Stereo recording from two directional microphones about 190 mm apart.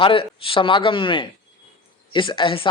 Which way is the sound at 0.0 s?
30° left (ahead or behind).